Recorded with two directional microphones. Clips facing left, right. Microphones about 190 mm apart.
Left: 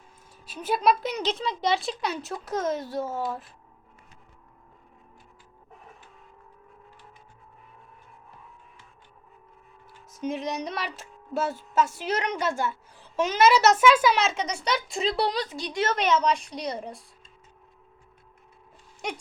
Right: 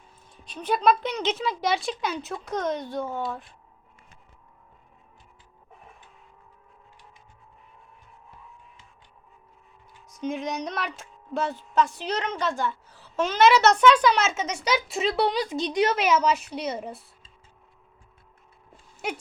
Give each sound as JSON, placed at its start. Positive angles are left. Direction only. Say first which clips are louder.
{"t": 0.4, "sound": "a woman's voice", "louder": "right 1 dB", "side_deg": 5}
{"t": 10.1, "sound": "a woman's voice", "louder": "even", "side_deg": 0}
{"t": 15.4, "sound": "a woman's voice", "louder": "right 5 dB", "side_deg": -20}
{"t": 15.9, "sound": "a woman's voice", "louder": "right 1 dB", "side_deg": -10}
{"t": 19.0, "sound": "a woman's voice", "louder": "right 2 dB", "side_deg": -5}